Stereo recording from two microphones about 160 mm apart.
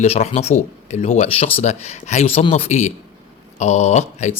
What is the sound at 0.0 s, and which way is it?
Speech, 40° left (ahead or behind).